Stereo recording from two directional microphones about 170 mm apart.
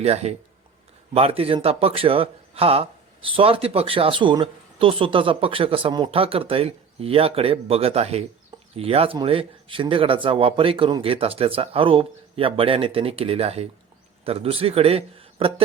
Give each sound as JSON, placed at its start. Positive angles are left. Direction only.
{"t": 0.0, "sound": "speech", "side_deg": -40}